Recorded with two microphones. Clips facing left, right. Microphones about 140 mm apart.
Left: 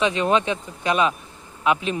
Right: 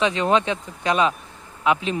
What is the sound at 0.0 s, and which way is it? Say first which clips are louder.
Speech: even; 25° right (ahead or behind).